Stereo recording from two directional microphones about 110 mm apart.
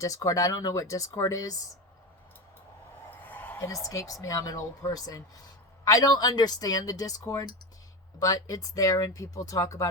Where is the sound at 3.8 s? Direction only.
30° left (ahead or behind).